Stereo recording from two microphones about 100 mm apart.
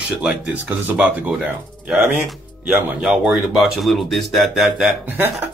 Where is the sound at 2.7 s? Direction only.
20° right (ahead or behind).